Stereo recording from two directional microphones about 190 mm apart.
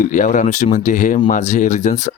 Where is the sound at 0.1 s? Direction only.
40° left (ahead or behind).